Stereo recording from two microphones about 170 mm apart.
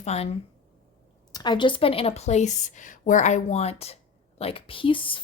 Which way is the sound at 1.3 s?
25° left (ahead or behind).